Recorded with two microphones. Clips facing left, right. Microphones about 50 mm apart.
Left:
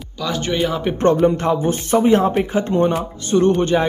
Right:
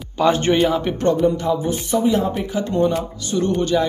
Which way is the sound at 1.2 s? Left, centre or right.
Left.